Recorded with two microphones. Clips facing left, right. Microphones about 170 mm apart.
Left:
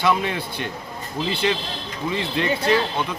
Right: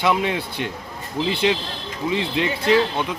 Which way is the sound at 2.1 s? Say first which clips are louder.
Even; 15° right (ahead or behind).